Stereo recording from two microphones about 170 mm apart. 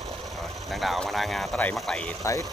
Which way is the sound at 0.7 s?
Centre (ahead or behind).